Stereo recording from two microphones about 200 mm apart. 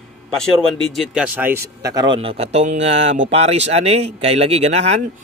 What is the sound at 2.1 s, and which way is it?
Speech, 30° right (ahead or behind).